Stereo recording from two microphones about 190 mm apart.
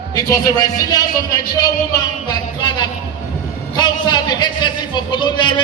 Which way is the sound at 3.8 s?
20° left (ahead or behind).